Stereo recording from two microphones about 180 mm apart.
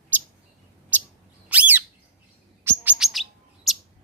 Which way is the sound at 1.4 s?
10° right (ahead or behind).